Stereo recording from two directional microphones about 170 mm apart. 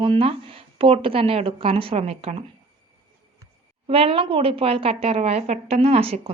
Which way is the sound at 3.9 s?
35° right (ahead or behind).